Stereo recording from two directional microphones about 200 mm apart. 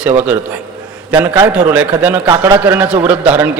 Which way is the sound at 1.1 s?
10° right (ahead or behind).